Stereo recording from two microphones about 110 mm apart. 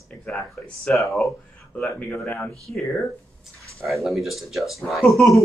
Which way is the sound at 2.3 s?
5° left (ahead or behind).